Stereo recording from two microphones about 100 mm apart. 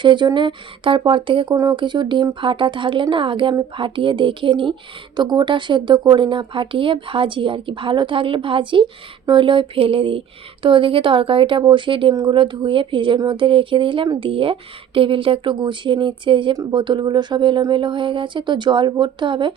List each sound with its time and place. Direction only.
0.0 s speech: 50° right (ahead or behind)